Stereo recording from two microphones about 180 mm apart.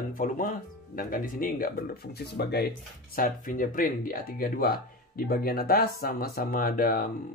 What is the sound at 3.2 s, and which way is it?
Speech, 50° left (ahead or behind).